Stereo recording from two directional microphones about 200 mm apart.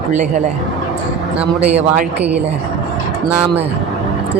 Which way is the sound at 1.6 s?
10° right (ahead or behind).